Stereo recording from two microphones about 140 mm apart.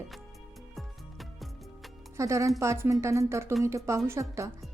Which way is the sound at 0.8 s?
Centre (ahead or behind).